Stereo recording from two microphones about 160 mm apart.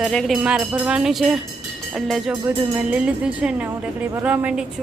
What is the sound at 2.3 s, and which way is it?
Speech, 10° right (ahead or behind).